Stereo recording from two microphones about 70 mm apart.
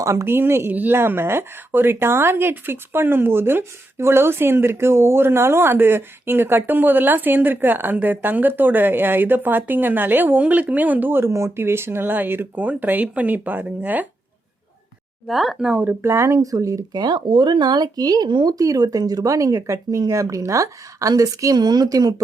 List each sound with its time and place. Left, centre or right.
0.0 s speech: right
11.3 s speech: right
15.3 s speech: centre
15.7 s speech: right
16.0 s speech: right
17.6 s speech: right
21.5 s speech: right